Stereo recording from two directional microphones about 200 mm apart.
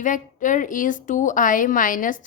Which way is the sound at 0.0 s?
40° left (ahead or behind).